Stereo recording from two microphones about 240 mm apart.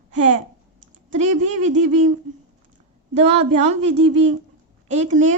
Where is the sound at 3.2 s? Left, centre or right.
Right.